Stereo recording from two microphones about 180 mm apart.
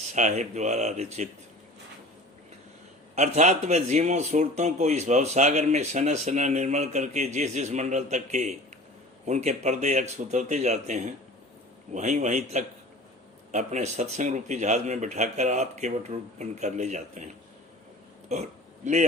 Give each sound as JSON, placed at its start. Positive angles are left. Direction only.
{"t": 0.1, "sound": "speech", "side_deg": -40}
{"t": 3.2, "sound": "speech", "side_deg": -40}
{"t": 18.8, "sound": "speech", "side_deg": -40}